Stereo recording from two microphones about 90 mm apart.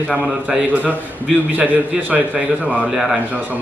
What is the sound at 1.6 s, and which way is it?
Speech, 20° right (ahead or behind).